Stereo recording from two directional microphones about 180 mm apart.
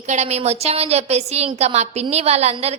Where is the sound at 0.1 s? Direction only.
40° right (ahead or behind).